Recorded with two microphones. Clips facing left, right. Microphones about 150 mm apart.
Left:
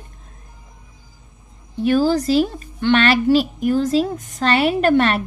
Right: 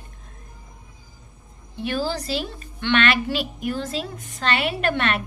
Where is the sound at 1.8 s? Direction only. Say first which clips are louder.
Left 10 dB; 45° left (ahead or behind).